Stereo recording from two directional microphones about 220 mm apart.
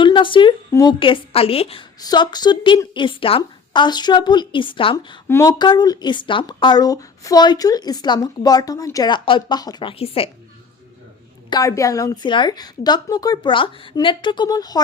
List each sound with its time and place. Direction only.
0.0 s a woman's voice: 20° left (ahead or behind)
11.5 s speech: 15° left (ahead or behind)